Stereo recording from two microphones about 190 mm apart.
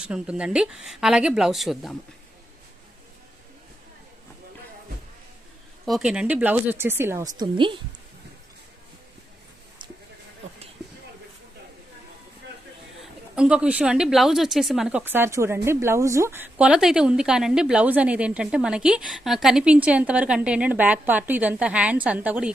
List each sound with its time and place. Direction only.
0.0 s a woman's voice: 5° right (ahead or behind)
5.8 s speech: centre (ahead or behind)
7.3 s a woman's voice: 25° right (ahead or behind)
13.0 s a woman's voice: 5° right (ahead or behind)